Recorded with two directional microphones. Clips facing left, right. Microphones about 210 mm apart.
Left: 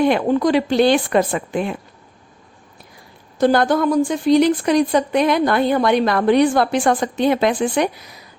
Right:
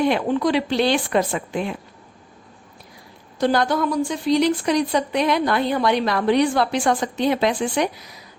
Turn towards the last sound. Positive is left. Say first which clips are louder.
# left 3 dB
turn(degrees=55)  # may be behind; listen again after turning